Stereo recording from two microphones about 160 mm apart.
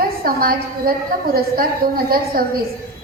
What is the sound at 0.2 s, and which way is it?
A woman's voice, 65° right (ahead or behind).